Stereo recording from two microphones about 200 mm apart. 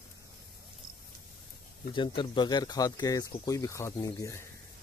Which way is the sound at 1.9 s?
25° left (ahead or behind).